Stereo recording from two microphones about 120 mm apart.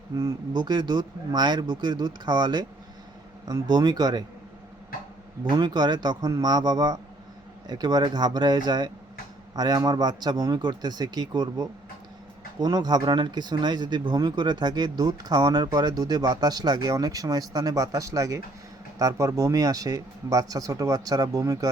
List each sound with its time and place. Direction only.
0.2 s speech: 35° right (ahead or behind)
5.5 s speech: 35° right (ahead or behind)